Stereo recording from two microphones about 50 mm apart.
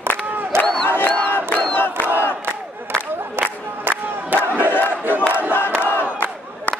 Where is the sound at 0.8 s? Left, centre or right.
Left.